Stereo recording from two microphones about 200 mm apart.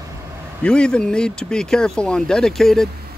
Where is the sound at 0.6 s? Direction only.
5° left (ahead or behind).